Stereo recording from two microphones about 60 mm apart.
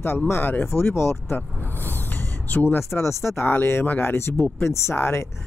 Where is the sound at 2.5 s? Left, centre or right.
Left.